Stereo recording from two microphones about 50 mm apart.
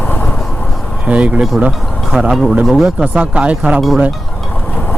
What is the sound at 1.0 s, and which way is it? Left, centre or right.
Speech, right.